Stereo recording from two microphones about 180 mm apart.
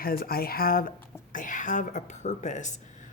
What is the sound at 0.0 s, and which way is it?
Speech, 55° left (ahead or behind).